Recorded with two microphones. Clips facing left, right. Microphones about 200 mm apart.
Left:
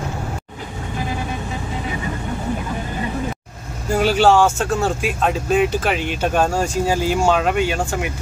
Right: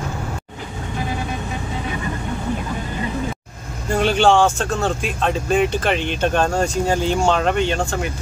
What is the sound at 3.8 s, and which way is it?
Speech, 5° left (ahead or behind).